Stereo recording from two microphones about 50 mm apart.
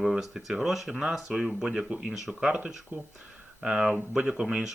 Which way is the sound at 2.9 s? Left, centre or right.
Right.